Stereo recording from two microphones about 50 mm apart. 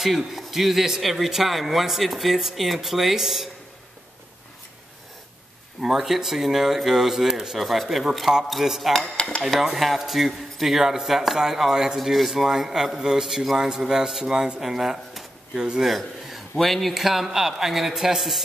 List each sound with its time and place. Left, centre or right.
0.0 s speech: centre
5.8 s speech: centre
9.1 s speech: centre
9.7 s speech: centre
15.9 s a sound: centre
16.5 s speech: centre